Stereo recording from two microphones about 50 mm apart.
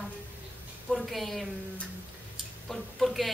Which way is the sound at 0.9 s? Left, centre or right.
Centre.